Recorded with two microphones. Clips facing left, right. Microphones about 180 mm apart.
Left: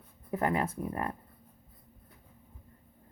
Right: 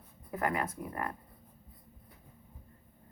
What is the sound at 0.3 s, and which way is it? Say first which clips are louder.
Speech: left 3 dB; 25° left (ahead or behind).